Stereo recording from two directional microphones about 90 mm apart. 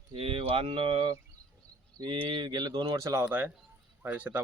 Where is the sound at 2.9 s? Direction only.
35° right (ahead or behind).